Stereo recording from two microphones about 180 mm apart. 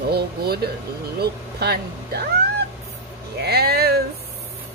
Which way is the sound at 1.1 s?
65° right (ahead or behind).